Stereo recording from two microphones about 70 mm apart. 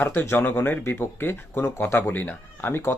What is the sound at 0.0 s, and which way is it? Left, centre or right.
Speech, left.